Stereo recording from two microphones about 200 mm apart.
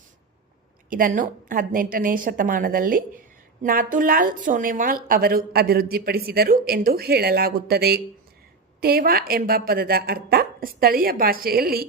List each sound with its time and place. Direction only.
0.9 s a woman's voice: 45° right (ahead or behind)